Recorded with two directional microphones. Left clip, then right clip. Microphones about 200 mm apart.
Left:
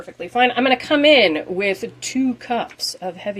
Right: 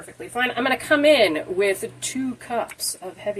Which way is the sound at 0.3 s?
40° left (ahead or behind).